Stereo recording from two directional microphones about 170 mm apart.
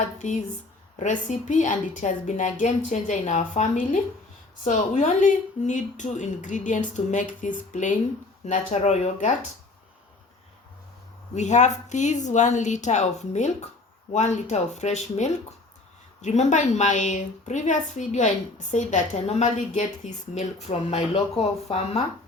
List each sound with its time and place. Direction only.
0.2 s a woman's voice: 45° left (ahead or behind)
11.3 s a woman's voice: 45° left (ahead or behind)